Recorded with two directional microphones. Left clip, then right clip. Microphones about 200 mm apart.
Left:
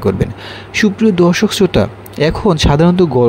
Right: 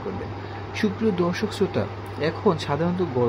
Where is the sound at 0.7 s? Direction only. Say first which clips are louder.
Left 11 dB; 40° left (ahead or behind).